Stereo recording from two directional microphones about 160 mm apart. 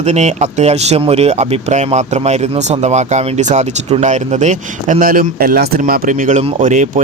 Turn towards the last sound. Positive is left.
turn(degrees=-50)  # may be behind; listen again after turning